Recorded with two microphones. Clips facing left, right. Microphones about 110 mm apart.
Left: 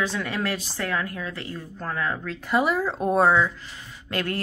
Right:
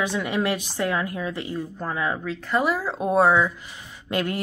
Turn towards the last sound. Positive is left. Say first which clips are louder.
# right 2 dB
turn(degrees=-15)  # may be behind; listen again after turning